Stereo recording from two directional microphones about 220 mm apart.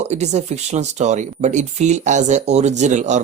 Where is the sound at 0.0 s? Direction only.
30° right (ahead or behind).